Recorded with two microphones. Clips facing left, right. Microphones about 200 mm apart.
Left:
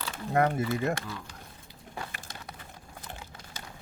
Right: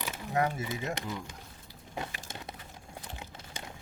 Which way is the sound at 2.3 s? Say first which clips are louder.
Right 2 dB; 25° right (ahead or behind).